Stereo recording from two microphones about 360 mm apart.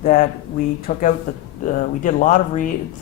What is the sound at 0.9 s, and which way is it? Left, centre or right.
Speech, left.